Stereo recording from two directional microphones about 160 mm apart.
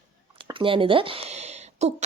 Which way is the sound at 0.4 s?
30° right (ahead or behind).